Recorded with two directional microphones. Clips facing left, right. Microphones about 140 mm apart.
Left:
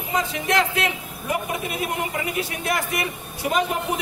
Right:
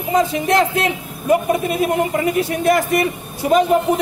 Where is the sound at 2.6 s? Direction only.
40° right (ahead or behind).